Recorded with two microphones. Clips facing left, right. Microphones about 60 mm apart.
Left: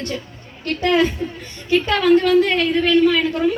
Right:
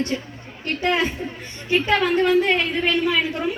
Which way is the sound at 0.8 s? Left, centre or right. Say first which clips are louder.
Left 5 dB; right.